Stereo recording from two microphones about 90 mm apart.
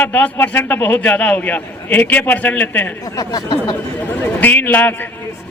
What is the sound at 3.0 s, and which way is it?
Speech, 40° left (ahead or behind).